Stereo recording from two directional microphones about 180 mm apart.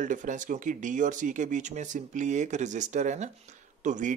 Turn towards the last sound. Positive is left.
turn(degrees=-45)  # may be behind; listen again after turning